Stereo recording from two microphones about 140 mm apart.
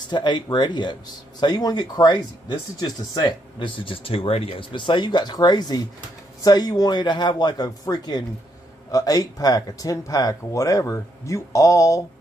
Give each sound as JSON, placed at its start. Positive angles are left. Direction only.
{"t": 0.1, "sound": "speech", "side_deg": 30}